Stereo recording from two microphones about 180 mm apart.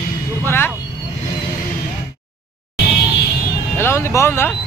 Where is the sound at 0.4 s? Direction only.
10° left (ahead or behind).